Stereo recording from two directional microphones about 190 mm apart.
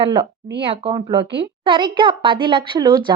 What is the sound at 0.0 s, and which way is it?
A woman's voice, 25° right (ahead or behind).